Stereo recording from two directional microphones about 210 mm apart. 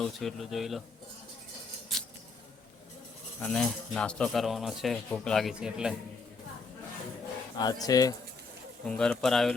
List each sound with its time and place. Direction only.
0.0 s speech: centre (ahead or behind)
1.9 s a sound: centre (ahead or behind)
3.4 s speech: 5° left (ahead or behind)
7.5 s speech: 20° left (ahead or behind)
8.8 s speech: 5° left (ahead or behind)